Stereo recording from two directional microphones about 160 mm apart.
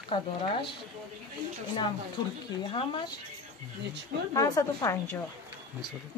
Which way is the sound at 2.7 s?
30° left (ahead or behind).